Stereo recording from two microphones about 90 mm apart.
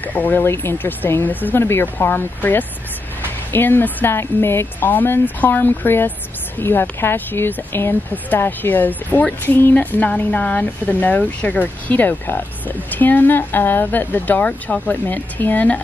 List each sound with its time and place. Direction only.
0.0 s speech: 20° left (ahead or behind)